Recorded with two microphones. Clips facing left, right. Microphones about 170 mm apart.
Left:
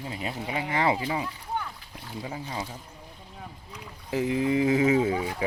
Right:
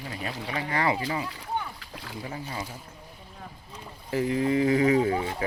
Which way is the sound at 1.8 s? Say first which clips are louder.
Right 2 dB; 90° right.